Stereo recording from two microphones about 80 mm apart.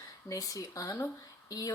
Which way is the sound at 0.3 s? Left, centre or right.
Left.